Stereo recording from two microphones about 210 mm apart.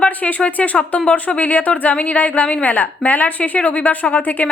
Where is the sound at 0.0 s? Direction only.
5° left (ahead or behind).